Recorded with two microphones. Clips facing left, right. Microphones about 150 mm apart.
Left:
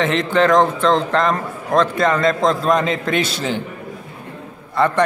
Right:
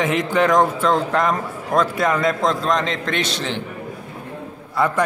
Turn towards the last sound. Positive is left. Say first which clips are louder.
# left 3 dB
turn(degrees=-5)  # may be behind; listen again after turning